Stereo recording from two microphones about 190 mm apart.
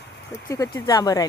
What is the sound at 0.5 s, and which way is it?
Speech, 15° left (ahead or behind).